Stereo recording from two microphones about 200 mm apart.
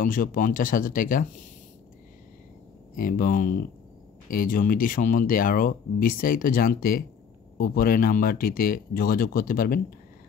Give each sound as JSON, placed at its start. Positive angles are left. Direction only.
{"t": 0.0, "sound": "speech", "side_deg": 45}
{"t": 3.0, "sound": "speech", "side_deg": 45}